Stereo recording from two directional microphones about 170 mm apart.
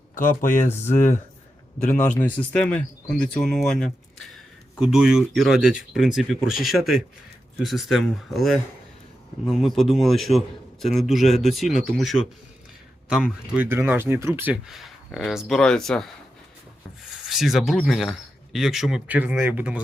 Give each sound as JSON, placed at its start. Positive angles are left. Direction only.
{"t": 0.1, "sound": "speech", "side_deg": 55}
{"t": 0.5, "sound": "speech", "side_deg": 15}
{"t": 1.8, "sound": "a man's voice", "side_deg": 45}
{"t": 2.0, "sound": "speech", "side_deg": 5}
{"t": 13.5, "sound": "speech", "side_deg": -10}
{"t": 17.2, "sound": "speech", "side_deg": 0}